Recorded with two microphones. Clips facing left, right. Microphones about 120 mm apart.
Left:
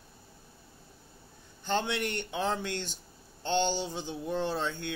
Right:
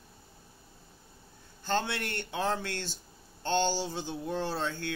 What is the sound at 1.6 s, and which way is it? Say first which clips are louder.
Speech: left 1 dB; 15° left (ahead or behind).